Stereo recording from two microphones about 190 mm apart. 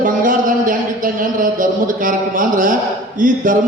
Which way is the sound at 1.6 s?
45° right (ahead or behind).